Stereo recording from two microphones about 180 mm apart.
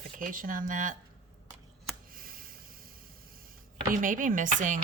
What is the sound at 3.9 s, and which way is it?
Speech, 45° right (ahead or behind).